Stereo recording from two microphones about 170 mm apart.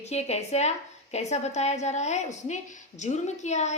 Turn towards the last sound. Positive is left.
turn(degrees=45)  # may be behind; listen again after turning